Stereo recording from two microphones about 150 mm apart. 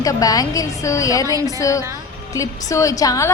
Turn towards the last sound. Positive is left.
turn(degrees=20)  # may be behind; listen again after turning